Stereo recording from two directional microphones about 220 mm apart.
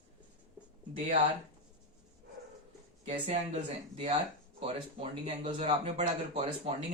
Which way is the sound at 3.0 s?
25° right (ahead or behind).